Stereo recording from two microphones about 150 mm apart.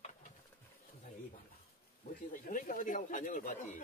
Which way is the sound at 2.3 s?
60° left (ahead or behind).